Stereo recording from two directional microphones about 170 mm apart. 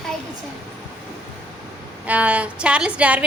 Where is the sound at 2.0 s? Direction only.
10° right (ahead or behind).